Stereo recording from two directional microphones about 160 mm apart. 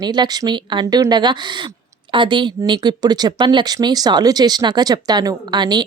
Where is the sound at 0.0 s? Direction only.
25° right (ahead or behind).